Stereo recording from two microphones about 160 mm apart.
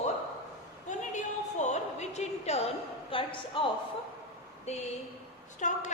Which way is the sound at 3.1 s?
35° left (ahead or behind).